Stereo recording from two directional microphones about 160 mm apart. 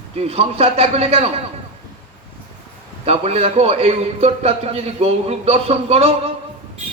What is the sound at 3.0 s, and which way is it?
A man's voice, 40° right (ahead or behind).